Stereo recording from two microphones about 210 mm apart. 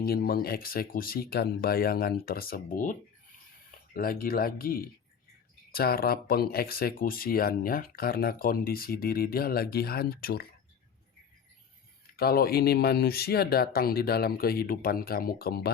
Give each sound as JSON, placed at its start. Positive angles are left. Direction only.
{"t": 0.0, "sound": "speech", "side_deg": 45}
{"t": 12.1, "sound": "speech", "side_deg": 45}